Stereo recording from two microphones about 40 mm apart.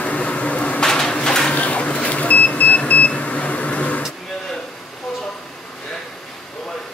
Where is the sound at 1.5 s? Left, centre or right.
Left.